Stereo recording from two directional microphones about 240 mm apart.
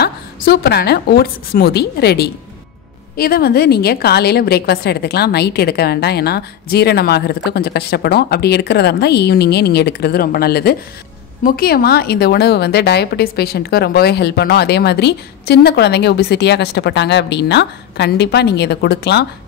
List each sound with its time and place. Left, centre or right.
0.0 s a woman's voice: left